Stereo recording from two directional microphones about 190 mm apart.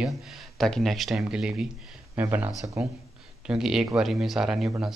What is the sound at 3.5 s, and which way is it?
Speech, centre (ahead or behind).